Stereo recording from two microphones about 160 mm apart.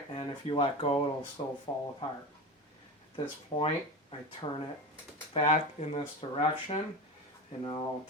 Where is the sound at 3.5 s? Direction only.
30° left (ahead or behind).